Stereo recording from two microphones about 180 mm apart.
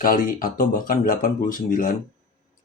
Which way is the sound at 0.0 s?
50° left (ahead or behind).